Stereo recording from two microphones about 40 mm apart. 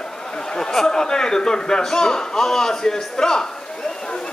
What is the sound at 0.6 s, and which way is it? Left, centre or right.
A man's voice, centre.